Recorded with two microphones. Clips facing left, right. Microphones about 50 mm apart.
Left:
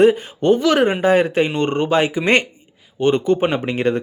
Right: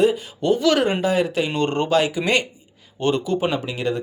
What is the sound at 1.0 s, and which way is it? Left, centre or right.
Speech, left.